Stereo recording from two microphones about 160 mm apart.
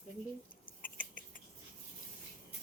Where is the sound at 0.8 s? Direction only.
55° left (ahead or behind).